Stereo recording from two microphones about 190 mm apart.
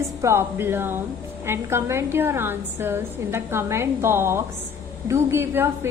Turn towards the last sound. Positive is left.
turn(degrees=-10)  # may be behind; listen again after turning